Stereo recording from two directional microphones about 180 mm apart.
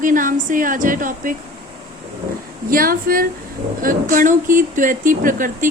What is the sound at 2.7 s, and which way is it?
Speech, 55° right (ahead or behind).